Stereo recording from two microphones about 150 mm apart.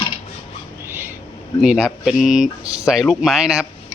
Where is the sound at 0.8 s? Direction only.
15° right (ahead or behind).